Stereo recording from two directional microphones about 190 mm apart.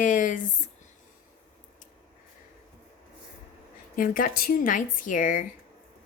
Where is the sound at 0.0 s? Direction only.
45° left (ahead or behind).